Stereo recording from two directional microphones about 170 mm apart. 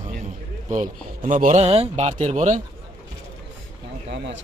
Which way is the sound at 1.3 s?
45° right (ahead or behind).